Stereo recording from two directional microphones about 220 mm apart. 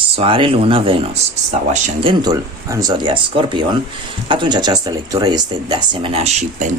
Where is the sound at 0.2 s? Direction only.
25° right (ahead or behind).